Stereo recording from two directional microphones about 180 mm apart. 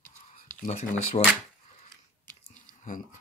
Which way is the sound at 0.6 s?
40° left (ahead or behind).